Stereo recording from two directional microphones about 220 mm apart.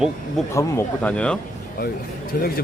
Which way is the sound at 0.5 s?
15° left (ahead or behind).